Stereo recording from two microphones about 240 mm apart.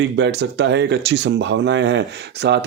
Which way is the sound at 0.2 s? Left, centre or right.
Right.